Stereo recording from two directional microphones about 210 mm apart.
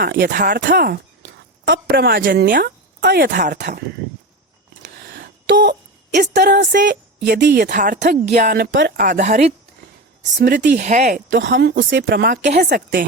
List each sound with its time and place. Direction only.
0.0 s speech: 45° right (ahead or behind)
1.6 s speech: 55° right (ahead or behind); by 3.6 s 40° right (ahead or behind)
4.8 s a sound: 55° right (ahead or behind)
6.3 s speech: 50° right (ahead or behind); by 9.5 s 35° right (ahead or behind)
10.4 s speech: 50° right (ahead or behind)
10.8 s speech: 35° right (ahead or behind)
11.3 s speech: 60° right (ahead or behind)